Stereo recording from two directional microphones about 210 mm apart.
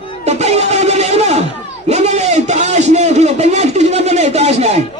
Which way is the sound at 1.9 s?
30° right (ahead or behind).